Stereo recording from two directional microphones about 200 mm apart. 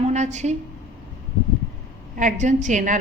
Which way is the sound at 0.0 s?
35° right (ahead or behind).